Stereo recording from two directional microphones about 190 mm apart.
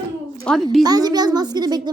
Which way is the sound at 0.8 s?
20° right (ahead or behind).